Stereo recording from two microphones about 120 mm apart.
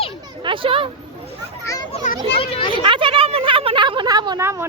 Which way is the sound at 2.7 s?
45° right (ahead or behind).